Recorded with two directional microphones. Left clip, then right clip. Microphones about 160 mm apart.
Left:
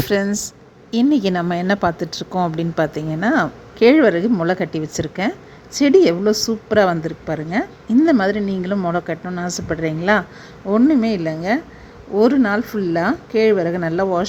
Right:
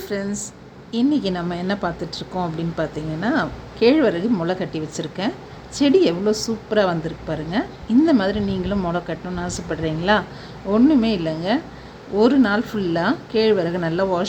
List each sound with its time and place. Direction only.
0.0 s a woman's voice: 70° left (ahead or behind); by 14.3 s 40° left (ahead or behind)